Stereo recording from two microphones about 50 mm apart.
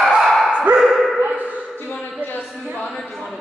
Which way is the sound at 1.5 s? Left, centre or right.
Left.